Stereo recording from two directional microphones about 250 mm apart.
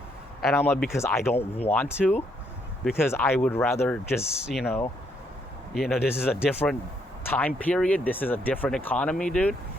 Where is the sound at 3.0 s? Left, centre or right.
Centre.